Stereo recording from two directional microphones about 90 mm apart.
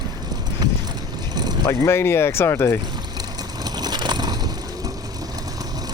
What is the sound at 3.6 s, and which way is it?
Crushing, 50° right (ahead or behind).